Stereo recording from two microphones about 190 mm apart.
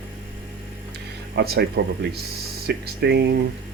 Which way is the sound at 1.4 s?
60° right (ahead or behind).